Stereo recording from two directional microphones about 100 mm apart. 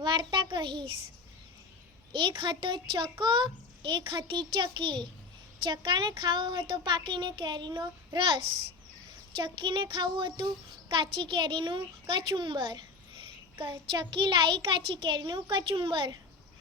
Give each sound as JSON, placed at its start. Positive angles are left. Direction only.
{"t": 0.0, "sound": "a child's voice", "side_deg": -50}
{"t": 2.1, "sound": "a child's voice", "side_deg": -55}
{"t": 9.3, "sound": "a child's voice", "side_deg": -55}